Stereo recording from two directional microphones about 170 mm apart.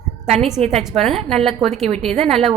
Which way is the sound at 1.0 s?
Centre (ahead or behind).